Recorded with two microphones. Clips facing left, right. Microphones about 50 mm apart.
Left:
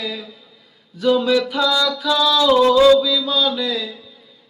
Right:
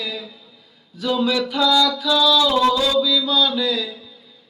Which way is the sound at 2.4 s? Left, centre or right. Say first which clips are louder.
Left 6 dB; left.